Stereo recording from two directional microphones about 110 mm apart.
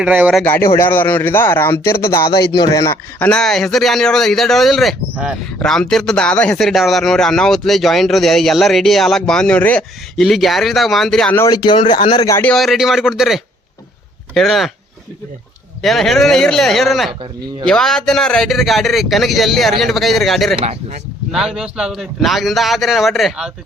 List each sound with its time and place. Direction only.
0.0 s speech: 10° right (ahead or behind)
0.4 s a man's voice: 20° left (ahead or behind)
10.2 s speech: centre (ahead or behind)
11.5 s speech: 45° left (ahead or behind)
12.5 s speech: centre (ahead or behind)
15.8 s speech: centre (ahead or behind)